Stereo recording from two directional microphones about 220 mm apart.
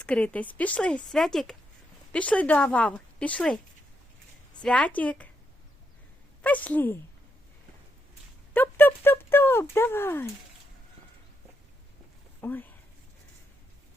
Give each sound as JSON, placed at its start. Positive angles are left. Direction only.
{"t": 0.0, "sound": "speech", "side_deg": 5}
{"t": 4.6, "sound": "a woman's voice", "side_deg": 5}
{"t": 6.4, "sound": "a woman's voice", "side_deg": 5}
{"t": 8.5, "sound": "speech", "side_deg": 10}
{"t": 12.4, "sound": "speech", "side_deg": 10}